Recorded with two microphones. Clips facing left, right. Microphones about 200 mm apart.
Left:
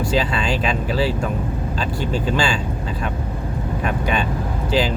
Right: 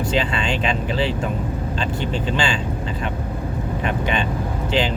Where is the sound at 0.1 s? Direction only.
40° left (ahead or behind).